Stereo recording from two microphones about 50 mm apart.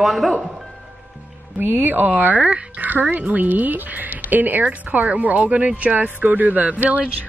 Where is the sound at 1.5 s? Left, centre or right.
Right.